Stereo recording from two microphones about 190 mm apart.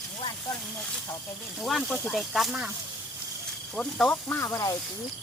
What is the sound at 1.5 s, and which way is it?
Speech, centre (ahead or behind).